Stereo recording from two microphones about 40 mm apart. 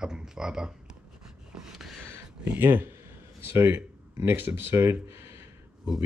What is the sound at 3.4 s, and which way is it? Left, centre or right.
Speech, right.